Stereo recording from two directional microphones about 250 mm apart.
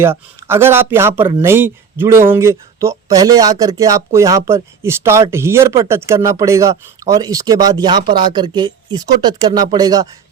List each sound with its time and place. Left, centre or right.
0.0 s speech: centre